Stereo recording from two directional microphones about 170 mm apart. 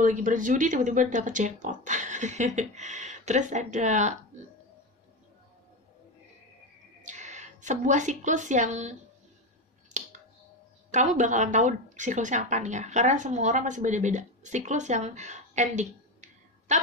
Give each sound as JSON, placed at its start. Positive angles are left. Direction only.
{"t": 0.0, "sound": "speech", "side_deg": -50}
{"t": 7.0, "sound": "a woman's voice", "side_deg": -45}
{"t": 10.9, "sound": "a woman's voice", "side_deg": -45}